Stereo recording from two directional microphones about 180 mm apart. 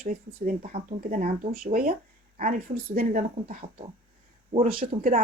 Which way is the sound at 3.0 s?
50° right (ahead or behind).